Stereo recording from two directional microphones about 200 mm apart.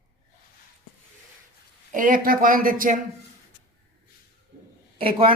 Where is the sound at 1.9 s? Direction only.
40° right (ahead or behind).